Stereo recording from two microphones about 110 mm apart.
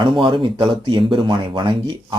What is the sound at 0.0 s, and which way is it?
Speech, 50° right (ahead or behind).